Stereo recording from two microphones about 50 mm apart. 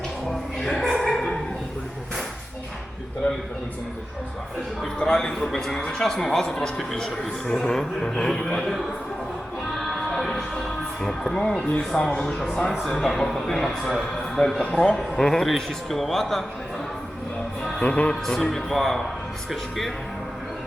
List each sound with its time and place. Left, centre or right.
0.3 s a man's voice: centre
1.0 s a sound: centre
4.8 s a man's voice: centre
9.7 s music: centre
11.0 s a man's voice: centre
17.8 s speech: left
18.1 s a man's voice: centre